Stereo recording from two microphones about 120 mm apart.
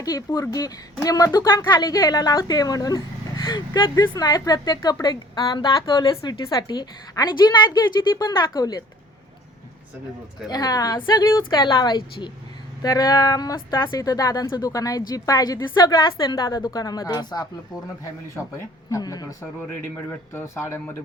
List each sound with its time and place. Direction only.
0.0 s speech: 30° left (ahead or behind)
10.4 s speech: 30° left (ahead or behind)
18.9 s speech: 30° left (ahead or behind)
19.8 s speech: 20° left (ahead or behind)